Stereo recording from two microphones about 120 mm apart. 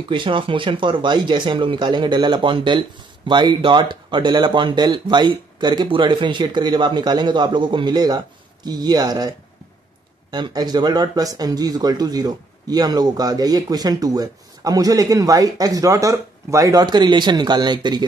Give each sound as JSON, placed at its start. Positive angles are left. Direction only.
{"t": 0.1, "sound": "speech", "side_deg": -45}
{"t": 10.3, "sound": "speech", "side_deg": -35}